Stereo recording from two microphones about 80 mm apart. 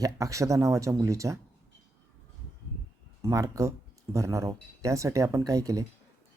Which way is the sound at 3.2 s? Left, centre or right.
Right.